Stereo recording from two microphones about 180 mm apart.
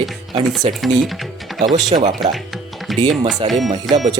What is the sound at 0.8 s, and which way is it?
Music, centre (ahead or behind).